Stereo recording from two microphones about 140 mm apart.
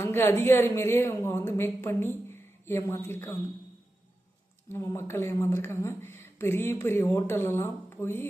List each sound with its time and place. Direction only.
0.0 s speech: 15° left (ahead or behind)
4.7 s speech: 20° left (ahead or behind)